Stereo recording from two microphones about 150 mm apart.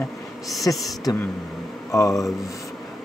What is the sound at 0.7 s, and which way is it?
Speech, 20° left (ahead or behind).